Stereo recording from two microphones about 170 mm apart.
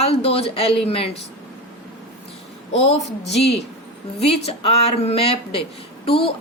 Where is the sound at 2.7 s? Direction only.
35° left (ahead or behind).